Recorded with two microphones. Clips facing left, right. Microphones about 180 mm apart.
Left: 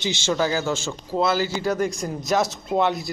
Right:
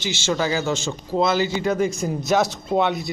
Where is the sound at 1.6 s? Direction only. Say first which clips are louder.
Right 2 dB; centre (ahead or behind).